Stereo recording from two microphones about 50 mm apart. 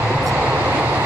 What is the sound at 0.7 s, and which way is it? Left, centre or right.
Vehicle, right.